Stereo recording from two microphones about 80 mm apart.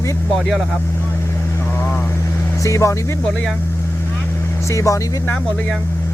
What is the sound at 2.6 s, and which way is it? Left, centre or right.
Speech, left.